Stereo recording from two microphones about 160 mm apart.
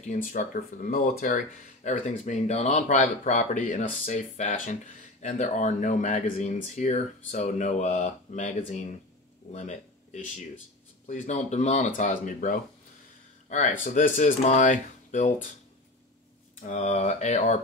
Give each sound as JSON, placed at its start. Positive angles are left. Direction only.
{"t": 0.3, "sound": "speech", "side_deg": 60}
{"t": 16.5, "sound": "speech", "side_deg": 50}